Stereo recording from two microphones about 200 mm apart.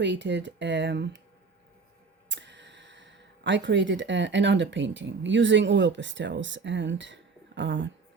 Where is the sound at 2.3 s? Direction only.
65° right (ahead or behind).